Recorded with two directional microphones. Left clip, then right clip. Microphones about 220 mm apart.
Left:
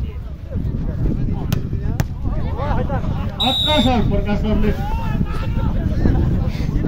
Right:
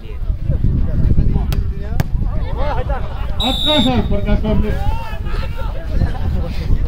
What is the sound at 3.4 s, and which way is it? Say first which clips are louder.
Speech: right 1 dB; 50° left (ahead or behind).